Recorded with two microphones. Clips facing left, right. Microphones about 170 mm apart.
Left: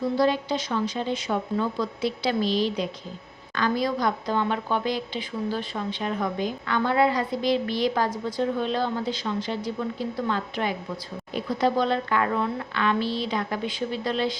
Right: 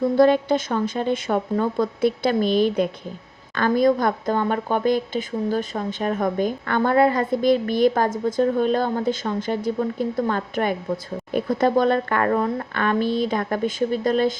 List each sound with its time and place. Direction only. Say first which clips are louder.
0.2 s speech: right 9 dB; 55° right (ahead or behind)